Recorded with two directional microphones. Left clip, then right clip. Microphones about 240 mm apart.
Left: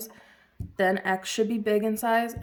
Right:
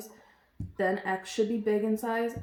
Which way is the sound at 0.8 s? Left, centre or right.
Left.